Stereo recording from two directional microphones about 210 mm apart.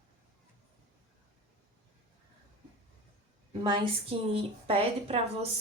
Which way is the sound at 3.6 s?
20° right (ahead or behind).